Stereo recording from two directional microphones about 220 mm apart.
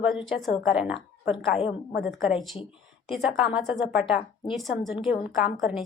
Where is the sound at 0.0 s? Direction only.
5° right (ahead or behind).